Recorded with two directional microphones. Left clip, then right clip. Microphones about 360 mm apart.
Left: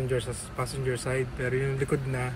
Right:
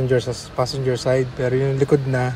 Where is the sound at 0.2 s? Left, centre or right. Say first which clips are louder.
Right 11 dB; centre.